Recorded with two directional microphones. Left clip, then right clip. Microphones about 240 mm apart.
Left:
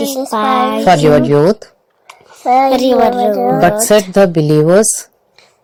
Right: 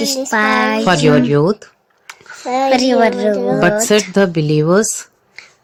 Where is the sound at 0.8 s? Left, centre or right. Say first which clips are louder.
Left 7 dB; centre.